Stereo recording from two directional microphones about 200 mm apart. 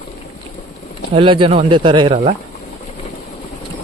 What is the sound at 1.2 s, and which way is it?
Speech, 25° right (ahead or behind).